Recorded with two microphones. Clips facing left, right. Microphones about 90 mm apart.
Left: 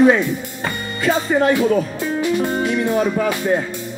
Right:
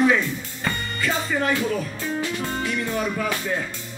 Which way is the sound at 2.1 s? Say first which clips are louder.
Left 9 dB; 20° left (ahead or behind).